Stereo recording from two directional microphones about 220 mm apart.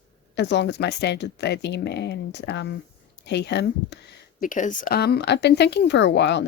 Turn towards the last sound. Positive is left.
turn(degrees=50)  # may be behind; listen again after turning